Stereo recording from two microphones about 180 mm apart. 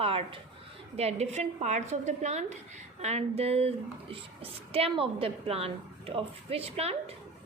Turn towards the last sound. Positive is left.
turn(degrees=-35)  # may be behind; listen again after turning